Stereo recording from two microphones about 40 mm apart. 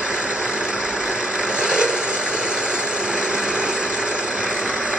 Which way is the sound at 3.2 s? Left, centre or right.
Right.